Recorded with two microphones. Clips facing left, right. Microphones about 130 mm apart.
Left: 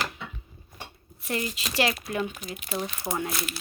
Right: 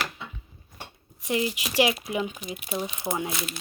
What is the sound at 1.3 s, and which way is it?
Speech, 15° right (ahead or behind).